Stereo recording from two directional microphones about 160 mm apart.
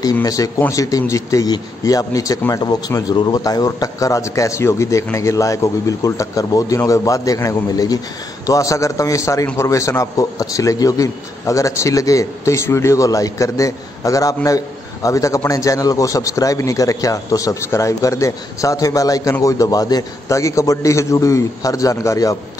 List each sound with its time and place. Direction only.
0.0 s a man's voice: 20° left (ahead or behind)